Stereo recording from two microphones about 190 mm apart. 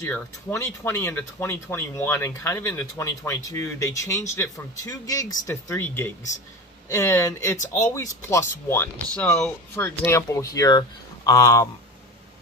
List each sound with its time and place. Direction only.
0.1 s a man's voice: 10° left (ahead or behind)